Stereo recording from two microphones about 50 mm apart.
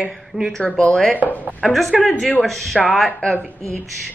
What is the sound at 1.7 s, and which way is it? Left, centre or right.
A woman's voice, centre.